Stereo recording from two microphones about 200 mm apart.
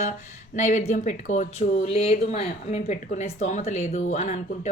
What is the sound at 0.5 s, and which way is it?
Speech, 40° left (ahead or behind).